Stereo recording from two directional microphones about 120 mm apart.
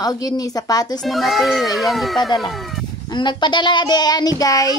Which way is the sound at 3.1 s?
40° left (ahead or behind).